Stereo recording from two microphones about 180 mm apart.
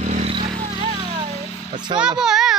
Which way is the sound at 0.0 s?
40° right (ahead or behind).